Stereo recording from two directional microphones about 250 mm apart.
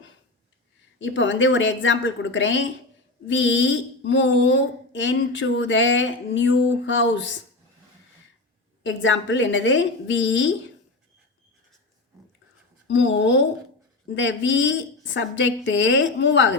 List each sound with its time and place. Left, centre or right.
0.9 s a woman's voice: left
8.8 s a woman's voice: left
12.9 s a woman's voice: left